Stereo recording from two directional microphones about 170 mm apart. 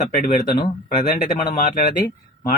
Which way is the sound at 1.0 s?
60° left (ahead or behind).